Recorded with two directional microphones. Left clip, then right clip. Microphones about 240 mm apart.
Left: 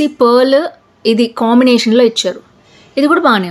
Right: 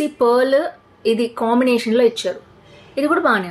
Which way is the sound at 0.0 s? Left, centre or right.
Left.